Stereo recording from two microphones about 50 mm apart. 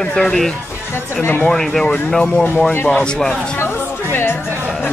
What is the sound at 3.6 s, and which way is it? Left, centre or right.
Speech, left.